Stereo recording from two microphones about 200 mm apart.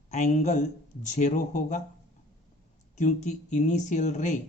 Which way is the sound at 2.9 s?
35° left (ahead or behind).